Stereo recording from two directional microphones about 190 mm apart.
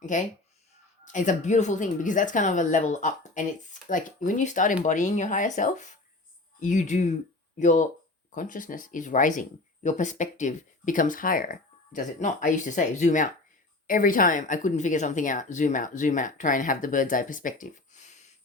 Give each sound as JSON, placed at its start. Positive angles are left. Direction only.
{"t": 0.0, "sound": "speech", "side_deg": 40}